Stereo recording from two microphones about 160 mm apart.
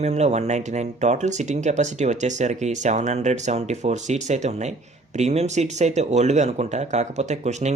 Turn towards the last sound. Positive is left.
turn(degrees=-45)  # may be behind; listen again after turning